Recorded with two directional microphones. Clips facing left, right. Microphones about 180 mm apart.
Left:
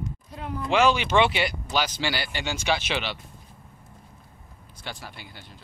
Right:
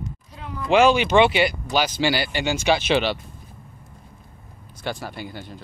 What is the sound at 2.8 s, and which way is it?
Speech, 30° right (ahead or behind).